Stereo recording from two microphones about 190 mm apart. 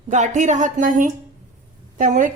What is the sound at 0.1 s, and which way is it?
A woman's voice, 40° right (ahead or behind).